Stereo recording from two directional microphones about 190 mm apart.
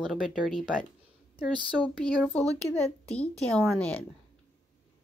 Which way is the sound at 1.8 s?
5° left (ahead or behind).